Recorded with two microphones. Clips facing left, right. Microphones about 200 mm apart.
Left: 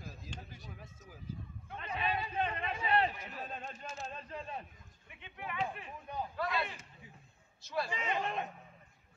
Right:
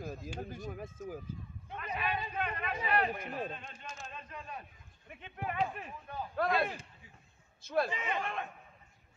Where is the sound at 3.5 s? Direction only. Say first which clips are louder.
Left 2 dB; 40° left (ahead or behind).